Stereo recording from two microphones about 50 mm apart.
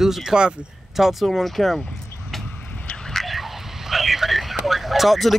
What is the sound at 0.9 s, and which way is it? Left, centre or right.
Speech, centre.